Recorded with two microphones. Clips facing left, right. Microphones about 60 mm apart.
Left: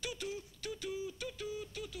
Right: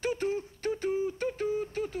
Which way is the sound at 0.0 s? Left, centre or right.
Right.